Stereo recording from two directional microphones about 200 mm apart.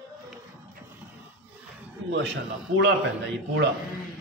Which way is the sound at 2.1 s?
60° right (ahead or behind).